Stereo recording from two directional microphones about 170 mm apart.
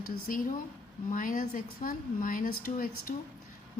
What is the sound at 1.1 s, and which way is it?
A woman's voice, 50° left (ahead or behind).